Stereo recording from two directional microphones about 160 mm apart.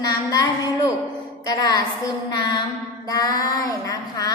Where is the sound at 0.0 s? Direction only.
25° left (ahead or behind).